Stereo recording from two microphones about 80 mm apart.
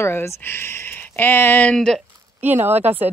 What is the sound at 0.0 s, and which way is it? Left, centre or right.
Speech, left.